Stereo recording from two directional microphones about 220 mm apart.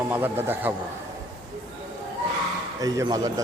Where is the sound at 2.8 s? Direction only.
15° right (ahead or behind).